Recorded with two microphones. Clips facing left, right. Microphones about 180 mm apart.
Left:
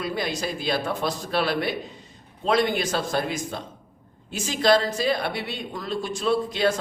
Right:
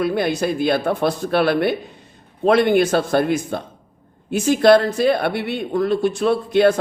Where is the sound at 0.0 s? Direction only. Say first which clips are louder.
Right 8 dB; 60° right (ahead or behind).